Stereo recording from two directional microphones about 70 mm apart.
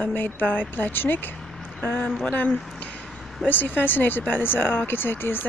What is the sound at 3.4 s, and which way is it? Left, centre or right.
Speech, left.